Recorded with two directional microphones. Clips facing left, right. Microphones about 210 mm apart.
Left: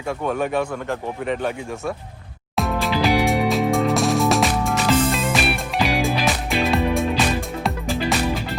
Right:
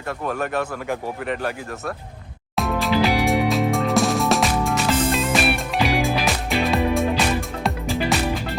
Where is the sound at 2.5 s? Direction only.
Centre (ahead or behind).